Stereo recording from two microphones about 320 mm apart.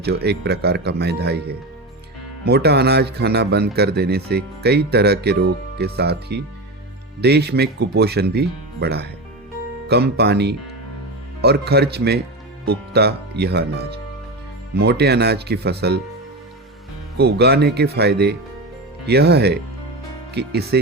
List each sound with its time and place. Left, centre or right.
0.0 s speech: right
14.8 s speech: right
17.2 s speech: right